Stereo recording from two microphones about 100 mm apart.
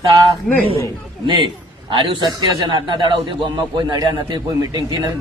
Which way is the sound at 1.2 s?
55° right (ahead or behind).